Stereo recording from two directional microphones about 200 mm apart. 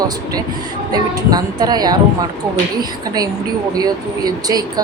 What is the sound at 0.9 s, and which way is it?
Speech, 20° right (ahead or behind).